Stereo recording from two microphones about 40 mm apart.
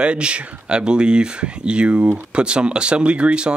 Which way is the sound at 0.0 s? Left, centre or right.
Right.